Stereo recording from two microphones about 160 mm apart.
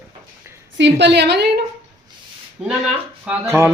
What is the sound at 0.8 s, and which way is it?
Speech, 90° right.